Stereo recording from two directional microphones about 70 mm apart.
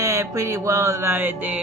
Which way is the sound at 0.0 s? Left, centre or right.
Right.